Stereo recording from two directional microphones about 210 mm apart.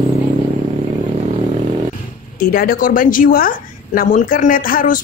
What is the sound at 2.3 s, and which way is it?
A woman's voice, 40° left (ahead or behind).